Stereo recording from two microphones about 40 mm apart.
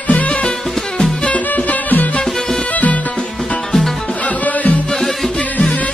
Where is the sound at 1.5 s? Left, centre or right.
Left.